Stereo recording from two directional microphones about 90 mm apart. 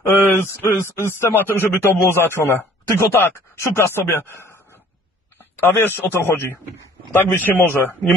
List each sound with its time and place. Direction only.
0.1 s speech: 25° left (ahead or behind)
5.6 s speech: 25° left (ahead or behind)